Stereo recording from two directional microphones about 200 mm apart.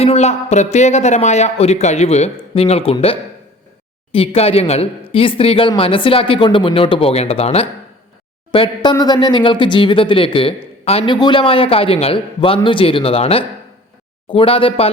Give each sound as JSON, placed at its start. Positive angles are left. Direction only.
{"t": 0.0, "sound": "speech", "side_deg": 30}